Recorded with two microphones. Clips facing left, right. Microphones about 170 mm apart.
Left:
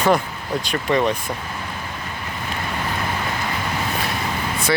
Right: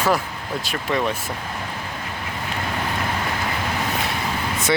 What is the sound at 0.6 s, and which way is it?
Speech, 5° right (ahead or behind).